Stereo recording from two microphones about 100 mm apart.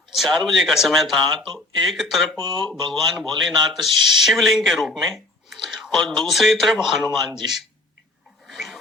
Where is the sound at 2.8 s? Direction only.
55° right (ahead or behind).